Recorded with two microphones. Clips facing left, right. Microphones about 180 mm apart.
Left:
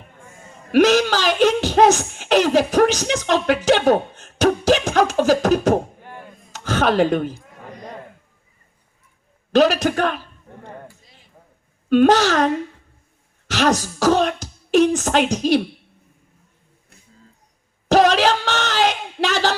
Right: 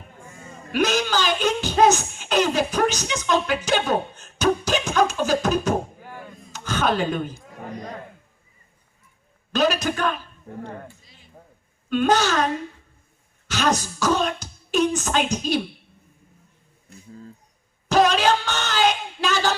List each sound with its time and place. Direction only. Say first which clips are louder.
0.7 s music: left 7 dB; 90° left
9.5 s a man's voice: left 6 dB; 90° left
11.9 s a man's voice: left 6 dB; 85° left
13.5 s speech: left 4 dB; 90° left
17.8 s a sound: left 3 dB; 85° left